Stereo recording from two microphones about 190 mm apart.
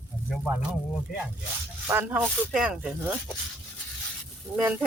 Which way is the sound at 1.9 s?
10° right (ahead or behind).